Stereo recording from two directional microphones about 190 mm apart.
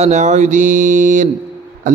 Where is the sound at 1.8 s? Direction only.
45° right (ahead or behind).